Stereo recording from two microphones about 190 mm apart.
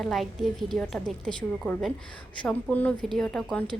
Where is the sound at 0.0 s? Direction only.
Centre (ahead or behind).